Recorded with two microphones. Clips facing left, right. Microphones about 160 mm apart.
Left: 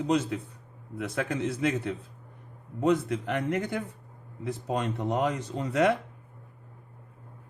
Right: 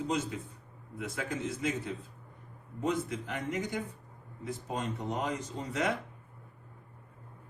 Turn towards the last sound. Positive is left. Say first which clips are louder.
# left 8 dB
turn(degrees=65)  # may be behind; listen again after turning